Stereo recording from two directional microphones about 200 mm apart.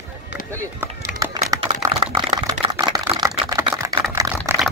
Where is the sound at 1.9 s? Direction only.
25° right (ahead or behind).